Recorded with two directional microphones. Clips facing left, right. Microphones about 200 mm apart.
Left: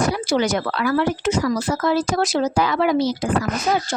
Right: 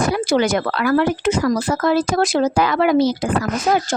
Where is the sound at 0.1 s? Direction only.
55° right (ahead or behind).